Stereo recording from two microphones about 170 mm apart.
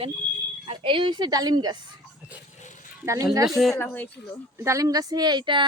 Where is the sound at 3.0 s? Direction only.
20° right (ahead or behind).